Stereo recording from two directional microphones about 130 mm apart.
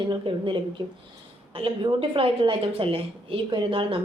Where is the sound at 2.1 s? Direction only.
45° right (ahead or behind).